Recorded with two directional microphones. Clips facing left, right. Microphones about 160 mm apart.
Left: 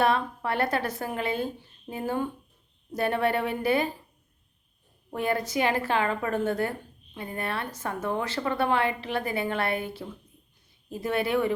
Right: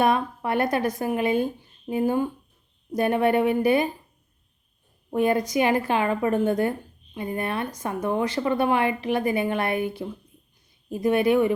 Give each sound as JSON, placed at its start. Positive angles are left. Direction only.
{"t": 0.0, "sound": "a woman's voice", "side_deg": -15}
{"t": 5.1, "sound": "a woman's voice", "side_deg": -15}